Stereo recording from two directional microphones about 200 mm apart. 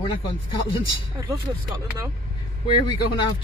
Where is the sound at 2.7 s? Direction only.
25° left (ahead or behind).